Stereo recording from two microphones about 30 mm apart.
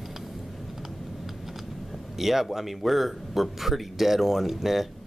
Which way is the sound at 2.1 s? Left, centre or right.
Centre.